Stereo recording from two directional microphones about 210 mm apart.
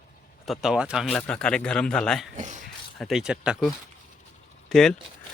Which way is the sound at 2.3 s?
35° right (ahead or behind).